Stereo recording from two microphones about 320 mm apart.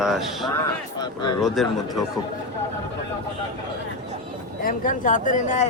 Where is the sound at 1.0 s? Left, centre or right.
Centre.